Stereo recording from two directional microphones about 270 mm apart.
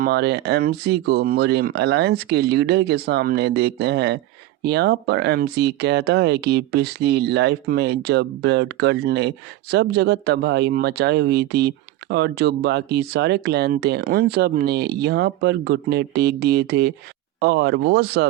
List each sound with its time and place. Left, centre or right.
0.0 s speech: right